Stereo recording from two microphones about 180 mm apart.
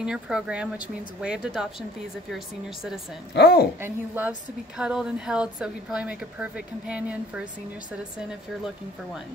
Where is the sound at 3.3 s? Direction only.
65° left (ahead or behind).